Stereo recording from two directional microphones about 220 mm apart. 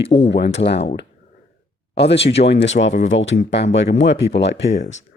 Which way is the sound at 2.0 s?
50° left (ahead or behind).